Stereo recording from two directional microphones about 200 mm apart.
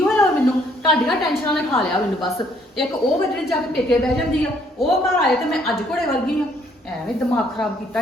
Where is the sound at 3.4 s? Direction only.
Centre (ahead or behind).